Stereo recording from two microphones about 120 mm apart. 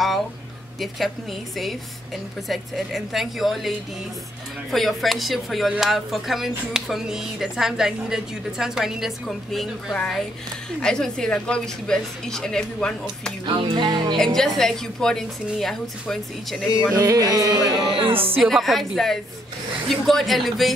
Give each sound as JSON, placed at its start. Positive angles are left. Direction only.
{"t": 0.7, "sound": "speech", "side_deg": 0}
{"t": 2.4, "sound": "speech", "side_deg": 0}
{"t": 13.5, "sound": "music", "side_deg": -40}
{"t": 14.1, "sound": "speech", "side_deg": 5}
{"t": 16.9, "sound": "music", "side_deg": -30}
{"t": 17.8, "sound": "music", "side_deg": -45}
{"t": 18.4, "sound": "speech", "side_deg": 0}